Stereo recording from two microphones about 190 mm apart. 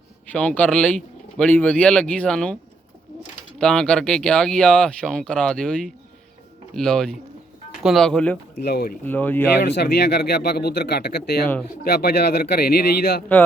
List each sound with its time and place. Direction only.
0.3 s speech: 5° left (ahead or behind)
3.6 s speech: 5° left (ahead or behind)
8.5 s speech: 55° left (ahead or behind)
9.0 s speech: 10° left (ahead or behind)
9.6 s speech: 60° left (ahead or behind)